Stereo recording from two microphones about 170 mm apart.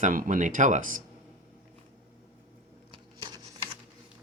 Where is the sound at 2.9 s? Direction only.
30° right (ahead or behind).